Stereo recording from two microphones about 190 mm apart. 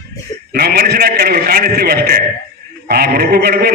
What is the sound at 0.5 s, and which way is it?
A man's voice, 55° right (ahead or behind).